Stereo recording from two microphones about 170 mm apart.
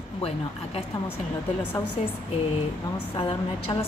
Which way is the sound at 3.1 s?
30° left (ahead or behind).